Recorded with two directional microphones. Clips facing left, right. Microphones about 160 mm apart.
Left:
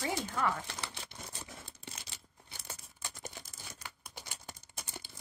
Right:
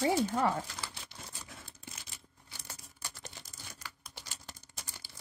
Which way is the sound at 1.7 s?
80° left.